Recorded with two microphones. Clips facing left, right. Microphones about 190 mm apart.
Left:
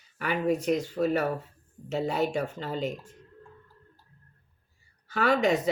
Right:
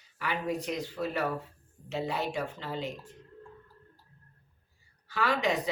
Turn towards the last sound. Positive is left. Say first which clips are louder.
# left 5 dB
turn(degrees=45)  # may be behind; listen again after turning